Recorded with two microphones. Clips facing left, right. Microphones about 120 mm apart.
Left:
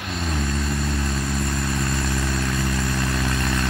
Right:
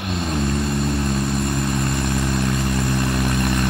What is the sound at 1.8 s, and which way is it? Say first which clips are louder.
Vehicle: right 3 dB; 20° right (ahead or behind).